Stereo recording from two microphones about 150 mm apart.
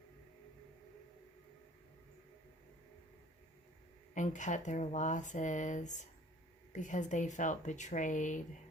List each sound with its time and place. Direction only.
4.1 s speech: 55° left (ahead or behind)